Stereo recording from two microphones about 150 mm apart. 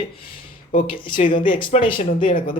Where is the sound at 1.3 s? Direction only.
35° left (ahead or behind).